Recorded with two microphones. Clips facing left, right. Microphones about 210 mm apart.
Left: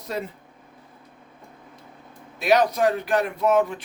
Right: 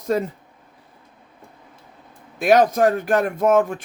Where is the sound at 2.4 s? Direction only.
50° right (ahead or behind).